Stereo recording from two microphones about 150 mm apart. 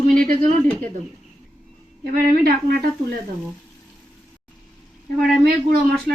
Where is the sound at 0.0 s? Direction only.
70° right (ahead or behind).